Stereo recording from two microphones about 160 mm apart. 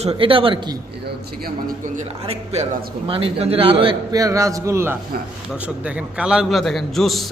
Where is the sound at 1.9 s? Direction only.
40° right (ahead or behind); by 4.9 s 15° right (ahead or behind).